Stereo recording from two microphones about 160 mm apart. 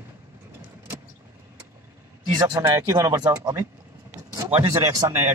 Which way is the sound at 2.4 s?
20° right (ahead or behind).